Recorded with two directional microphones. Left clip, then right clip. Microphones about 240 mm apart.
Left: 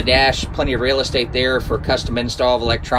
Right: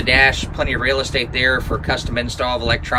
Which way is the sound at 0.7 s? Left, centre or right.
Centre.